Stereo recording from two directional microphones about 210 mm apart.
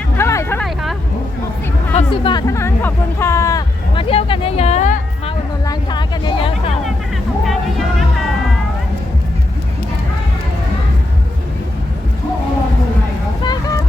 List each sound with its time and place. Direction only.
0.2 s hubbub: 15° left (ahead or behind)
2.0 s music: 20° left (ahead or behind)
4.1 s music: 25° left (ahead or behind)
5.6 s vehicle: 20° left (ahead or behind)
7.4 s music: centre (ahead or behind)
13.4 s vehicle: 20° left (ahead or behind)